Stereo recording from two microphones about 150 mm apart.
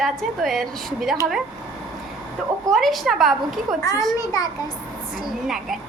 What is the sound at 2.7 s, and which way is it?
A woman's voice, centre (ahead or behind).